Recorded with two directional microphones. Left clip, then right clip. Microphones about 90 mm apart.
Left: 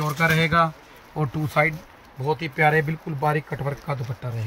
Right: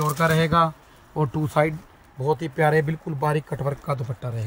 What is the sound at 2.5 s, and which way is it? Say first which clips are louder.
Speech: left 2 dB; 20° right (ahead or behind).